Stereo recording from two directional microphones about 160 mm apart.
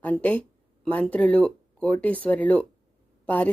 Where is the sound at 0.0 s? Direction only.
10° left (ahead or behind).